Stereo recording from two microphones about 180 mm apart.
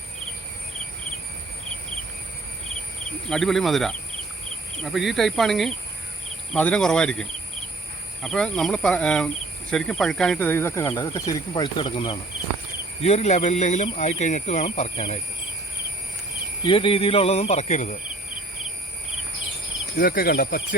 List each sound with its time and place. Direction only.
3.2 s speech: centre (ahead or behind); by 15.2 s 35° left (ahead or behind)
16.6 s speech: 30° left (ahead or behind)
20.0 s speech: 55° left (ahead or behind)